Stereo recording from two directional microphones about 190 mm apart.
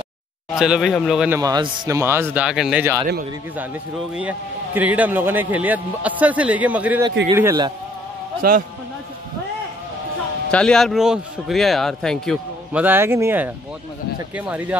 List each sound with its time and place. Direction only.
0.6 s a man's voice: centre (ahead or behind)
1.4 s a man's voice: 20° right (ahead or behind)
4.1 s a man's voice: 10° right (ahead or behind)
8.4 s a man's voice: 50° right (ahead or behind)
10.5 s a man's voice: 5° left (ahead or behind)
12.8 s a man's voice: 10° right (ahead or behind)